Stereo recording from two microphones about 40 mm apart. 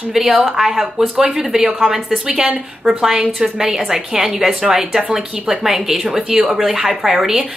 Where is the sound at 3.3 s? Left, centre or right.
Centre.